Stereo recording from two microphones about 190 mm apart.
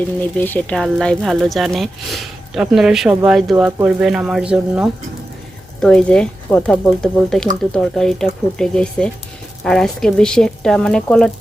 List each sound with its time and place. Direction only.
0.2 s speech: 10° left (ahead or behind)
3.5 s speech: 15° right (ahead or behind)
5.8 s speech: 5° left (ahead or behind)